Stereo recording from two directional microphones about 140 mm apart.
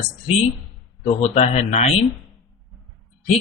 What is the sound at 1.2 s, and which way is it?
Speech, 50° left (ahead or behind).